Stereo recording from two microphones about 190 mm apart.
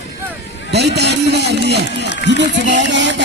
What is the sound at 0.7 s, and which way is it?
Speech, 60° right (ahead or behind).